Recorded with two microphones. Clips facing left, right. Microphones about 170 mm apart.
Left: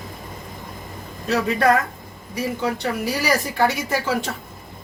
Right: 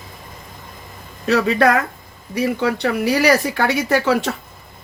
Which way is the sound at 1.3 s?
75° right (ahead or behind).